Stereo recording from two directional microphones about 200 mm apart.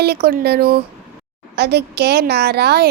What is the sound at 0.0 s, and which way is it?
A woman's voice, 55° right (ahead or behind).